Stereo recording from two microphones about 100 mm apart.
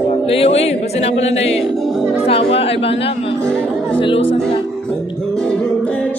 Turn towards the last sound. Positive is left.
turn(degrees=10)  # may be behind; listen again after turning